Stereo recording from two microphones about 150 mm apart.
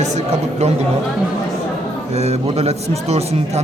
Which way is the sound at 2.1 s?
45° right (ahead or behind).